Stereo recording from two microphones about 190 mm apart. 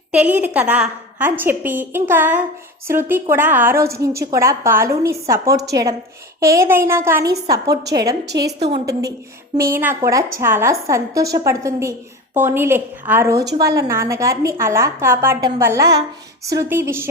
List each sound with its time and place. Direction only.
0.1 s a woman's voice: 5° right (ahead or behind)
8.3 s a woman's voice: 60° right (ahead or behind)
8.7 s a woman's voice: 20° right (ahead or behind)